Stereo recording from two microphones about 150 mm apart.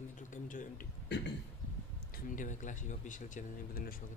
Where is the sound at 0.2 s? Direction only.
60° left (ahead or behind).